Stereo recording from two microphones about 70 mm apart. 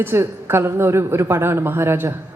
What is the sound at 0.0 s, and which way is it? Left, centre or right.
Speech, right.